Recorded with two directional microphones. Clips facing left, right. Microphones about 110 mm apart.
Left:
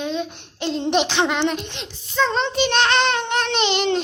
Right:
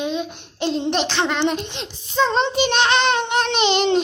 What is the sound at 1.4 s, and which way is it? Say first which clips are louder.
Speech: right 1 dB; 20° right (ahead or behind).